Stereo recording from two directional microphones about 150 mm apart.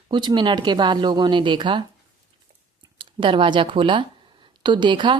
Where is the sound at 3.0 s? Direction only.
35° right (ahead or behind).